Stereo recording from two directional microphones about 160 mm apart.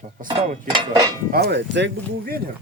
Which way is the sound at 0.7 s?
25° right (ahead or behind).